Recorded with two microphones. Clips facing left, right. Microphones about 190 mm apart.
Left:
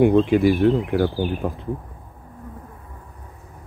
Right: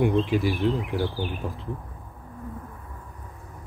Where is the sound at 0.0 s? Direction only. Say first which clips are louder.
Left 7 dB; 55° left (ahead or behind).